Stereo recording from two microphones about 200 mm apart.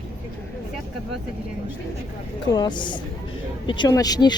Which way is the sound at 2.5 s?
20° left (ahead or behind).